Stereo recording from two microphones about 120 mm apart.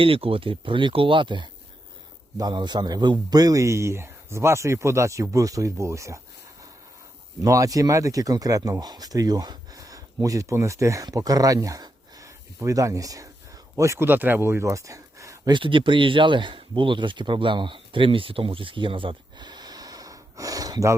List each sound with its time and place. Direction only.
0.0 s a man's voice: 50° right (ahead or behind); by 6.1 s 25° right (ahead or behind)
7.4 s speech: 30° right (ahead or behind)
15.5 s speech: 45° right (ahead or behind); by 20.9 s 30° right (ahead or behind)